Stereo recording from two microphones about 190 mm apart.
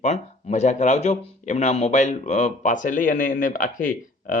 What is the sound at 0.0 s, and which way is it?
Speech, 40° left (ahead or behind).